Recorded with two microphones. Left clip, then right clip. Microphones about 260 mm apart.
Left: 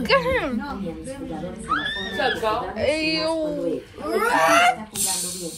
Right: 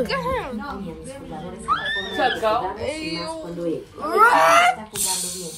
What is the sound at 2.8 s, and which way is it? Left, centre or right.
Speech, centre.